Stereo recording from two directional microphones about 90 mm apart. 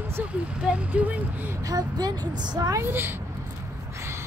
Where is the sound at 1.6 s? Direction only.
45° right (ahead or behind).